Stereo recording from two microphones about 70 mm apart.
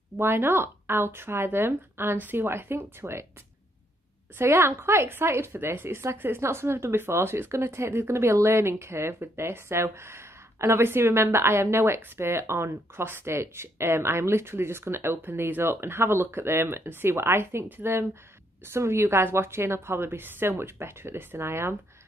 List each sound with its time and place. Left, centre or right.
0.2 s speech: right
4.4 s speech: right